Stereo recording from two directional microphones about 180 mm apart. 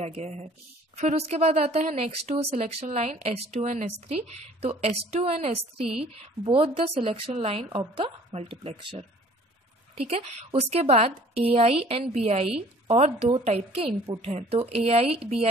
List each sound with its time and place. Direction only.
0.0 s speech: 35° right (ahead or behind)